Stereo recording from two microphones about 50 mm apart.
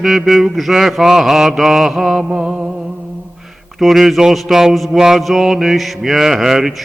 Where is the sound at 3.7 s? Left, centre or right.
Centre.